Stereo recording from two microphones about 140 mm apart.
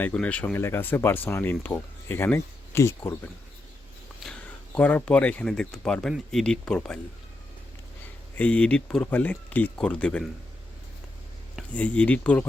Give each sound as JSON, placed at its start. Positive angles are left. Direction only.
{"t": 0.0, "sound": "speech", "side_deg": 10}
{"t": 4.2, "sound": "speech", "side_deg": 5}
{"t": 8.4, "sound": "speech", "side_deg": 10}
{"t": 11.7, "sound": "speech", "side_deg": 10}